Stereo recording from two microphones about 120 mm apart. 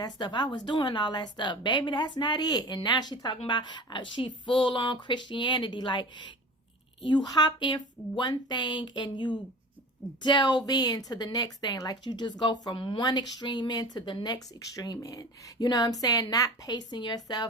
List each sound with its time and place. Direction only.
0.0 s speech: 35° left (ahead or behind)
7.3 s speech: 40° left (ahead or behind)